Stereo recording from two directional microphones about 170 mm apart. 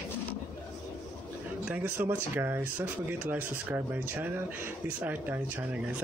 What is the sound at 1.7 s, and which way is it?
Speech, 10° right (ahead or behind).